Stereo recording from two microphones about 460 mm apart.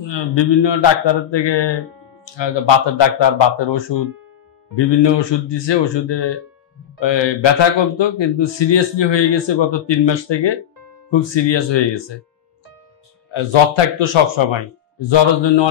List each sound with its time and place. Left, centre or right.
0.0 s speech: left
3.0 s speech: left
13.3 s a man's voice: left